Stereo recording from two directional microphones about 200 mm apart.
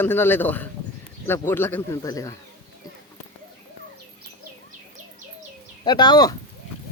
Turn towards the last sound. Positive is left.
turn(degrees=20)  # may be behind; listen again after turning